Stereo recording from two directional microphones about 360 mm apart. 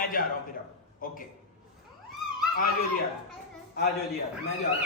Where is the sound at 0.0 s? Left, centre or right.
Left.